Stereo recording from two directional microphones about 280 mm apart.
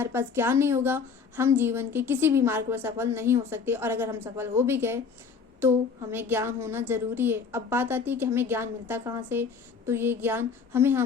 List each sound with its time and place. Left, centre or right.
0.0 s a woman's voice: centre